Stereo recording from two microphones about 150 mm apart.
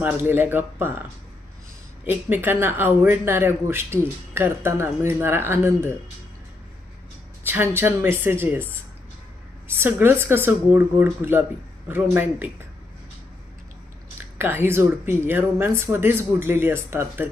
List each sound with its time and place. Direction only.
0.0 s a woman's voice: 15° right (ahead or behind)
2.0 s a woman's voice: 15° right (ahead or behind)
7.4 s a woman's voice: 15° right (ahead or behind)
9.6 s a woman's voice: 15° right (ahead or behind)
14.3 s a woman's voice: 15° right (ahead or behind)